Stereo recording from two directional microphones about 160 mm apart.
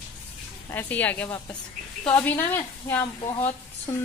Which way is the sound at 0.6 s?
10° left (ahead or behind).